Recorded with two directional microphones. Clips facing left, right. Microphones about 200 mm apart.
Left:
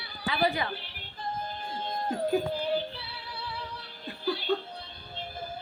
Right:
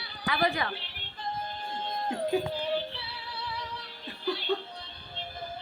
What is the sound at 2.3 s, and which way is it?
Music, 5° left (ahead or behind).